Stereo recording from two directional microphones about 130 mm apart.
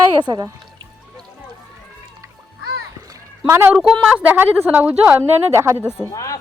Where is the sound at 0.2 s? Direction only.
35° right (ahead or behind).